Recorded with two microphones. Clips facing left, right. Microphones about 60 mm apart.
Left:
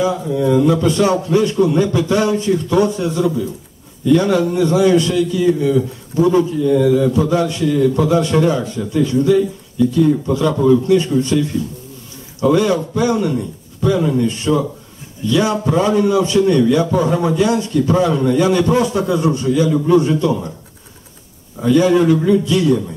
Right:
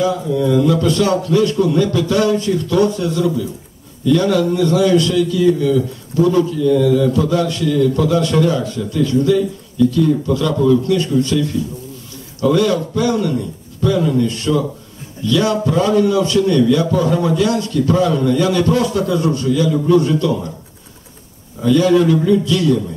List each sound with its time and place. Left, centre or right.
0.0 s a man's voice: left
21.5 s a man's voice: left